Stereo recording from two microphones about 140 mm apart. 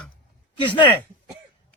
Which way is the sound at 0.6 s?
35° left (ahead or behind).